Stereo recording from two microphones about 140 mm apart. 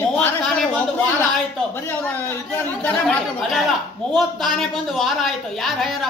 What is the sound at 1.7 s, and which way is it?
Speech, 15° left (ahead or behind).